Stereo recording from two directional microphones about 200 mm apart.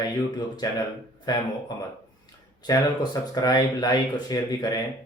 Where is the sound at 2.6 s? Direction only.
20° left (ahead or behind).